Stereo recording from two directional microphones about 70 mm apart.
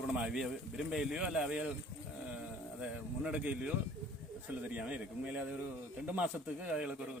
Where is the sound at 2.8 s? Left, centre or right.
Centre.